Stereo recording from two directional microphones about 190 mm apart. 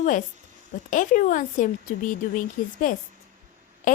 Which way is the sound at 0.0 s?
45° left (ahead or behind).